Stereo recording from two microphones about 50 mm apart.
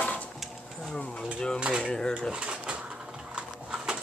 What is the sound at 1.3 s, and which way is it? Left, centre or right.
Drawer open or close, centre.